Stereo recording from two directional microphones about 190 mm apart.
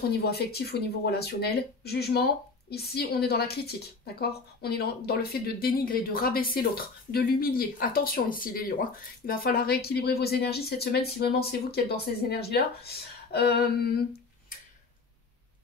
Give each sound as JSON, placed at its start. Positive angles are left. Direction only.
{"t": 0.1, "sound": "a woman's voice", "side_deg": 55}